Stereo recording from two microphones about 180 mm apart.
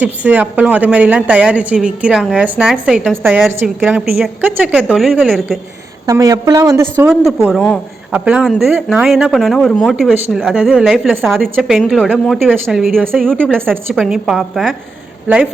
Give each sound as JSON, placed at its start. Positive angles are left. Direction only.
{"t": 0.0, "sound": "speech", "side_deg": -10}
{"t": 6.1, "sound": "speech", "side_deg": -20}
{"t": 7.4, "sound": "speech", "side_deg": 0}
{"t": 13.8, "sound": "speech", "side_deg": -5}